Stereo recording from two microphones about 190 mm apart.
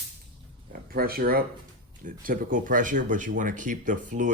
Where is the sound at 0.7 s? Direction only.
50° right (ahead or behind).